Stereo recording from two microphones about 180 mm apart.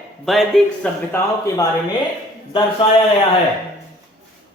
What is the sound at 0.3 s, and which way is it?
Speech, centre (ahead or behind).